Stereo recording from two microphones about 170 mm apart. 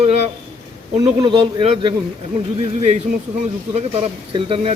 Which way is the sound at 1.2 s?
30° right (ahead or behind).